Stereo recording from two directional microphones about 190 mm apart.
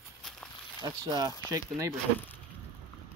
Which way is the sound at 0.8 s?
20° right (ahead or behind).